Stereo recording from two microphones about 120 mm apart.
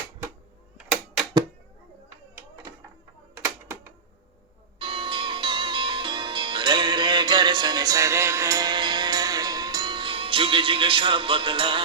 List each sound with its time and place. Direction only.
3.3 s typewriter: 25° right (ahead or behind)
4.8 s music: 45° right (ahead or behind)